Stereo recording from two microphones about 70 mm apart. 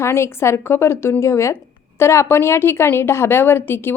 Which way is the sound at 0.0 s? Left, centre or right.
Left.